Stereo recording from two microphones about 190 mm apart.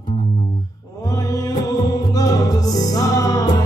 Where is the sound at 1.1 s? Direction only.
20° left (ahead or behind).